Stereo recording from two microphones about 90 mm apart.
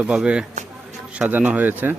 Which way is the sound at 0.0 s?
10° right (ahead or behind).